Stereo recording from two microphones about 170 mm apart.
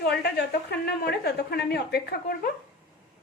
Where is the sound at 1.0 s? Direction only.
70° left (ahead or behind).